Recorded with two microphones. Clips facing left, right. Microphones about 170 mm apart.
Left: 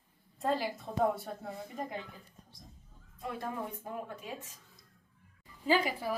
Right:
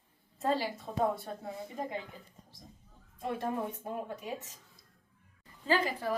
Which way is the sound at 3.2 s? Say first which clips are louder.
Right 4 dB; 25° right (ahead or behind).